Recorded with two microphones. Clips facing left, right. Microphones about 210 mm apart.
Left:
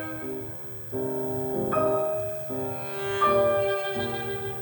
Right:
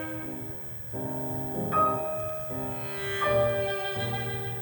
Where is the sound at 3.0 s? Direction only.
40° left (ahead or behind).